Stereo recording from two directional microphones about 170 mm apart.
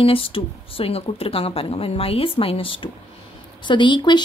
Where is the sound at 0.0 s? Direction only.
30° left (ahead or behind).